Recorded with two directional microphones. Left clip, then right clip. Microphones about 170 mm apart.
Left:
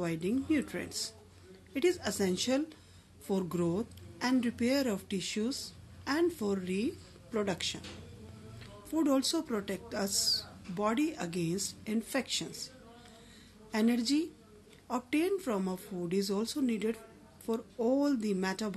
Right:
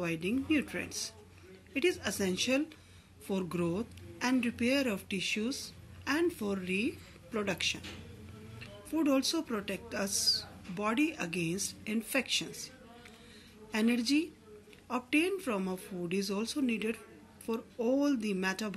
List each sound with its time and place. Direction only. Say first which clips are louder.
0.0 s speech: even; 45° left (ahead or behind)
13.7 s speech: even; 40° left (ahead or behind)